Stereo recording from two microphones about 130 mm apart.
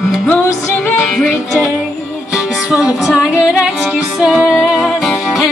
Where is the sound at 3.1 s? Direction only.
5° right (ahead or behind).